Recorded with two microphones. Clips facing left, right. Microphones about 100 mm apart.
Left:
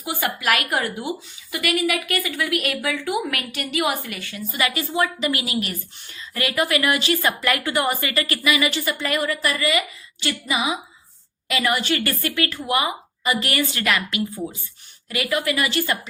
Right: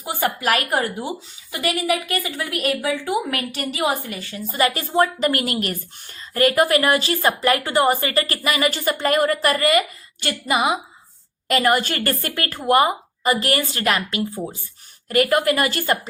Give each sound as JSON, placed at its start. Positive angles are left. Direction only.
{"t": 0.0, "sound": "a woman's voice", "side_deg": -35}